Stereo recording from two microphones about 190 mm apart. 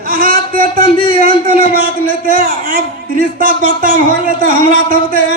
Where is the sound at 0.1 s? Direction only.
50° right (ahead or behind).